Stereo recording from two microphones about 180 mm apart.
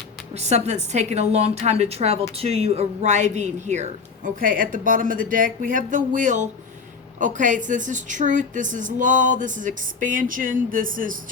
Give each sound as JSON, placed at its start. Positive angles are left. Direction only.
{"t": 0.3, "sound": "a woman's voice", "side_deg": -35}